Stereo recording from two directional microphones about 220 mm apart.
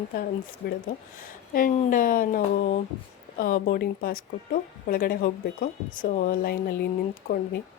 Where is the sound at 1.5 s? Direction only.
40° left (ahead or behind).